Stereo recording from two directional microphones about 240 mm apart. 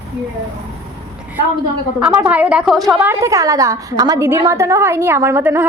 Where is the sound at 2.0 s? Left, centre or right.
Centre.